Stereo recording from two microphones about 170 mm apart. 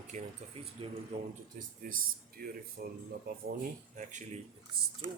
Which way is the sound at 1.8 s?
55° right (ahead or behind).